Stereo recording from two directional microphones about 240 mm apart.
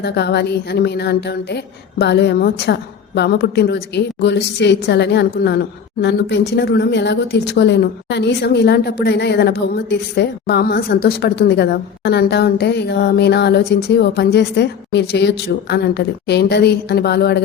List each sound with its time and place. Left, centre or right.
0.0 s a woman's voice: left